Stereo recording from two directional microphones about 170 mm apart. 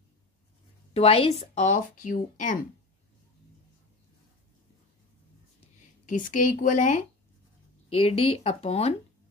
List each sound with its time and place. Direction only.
0.9 s speech: 35° left (ahead or behind)
6.0 s speech: 50° left (ahead or behind)
7.9 s speech: 35° left (ahead or behind)